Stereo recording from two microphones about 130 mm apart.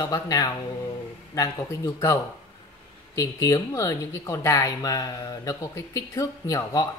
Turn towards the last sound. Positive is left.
turn(degrees=25)  # may be behind; listen again after turning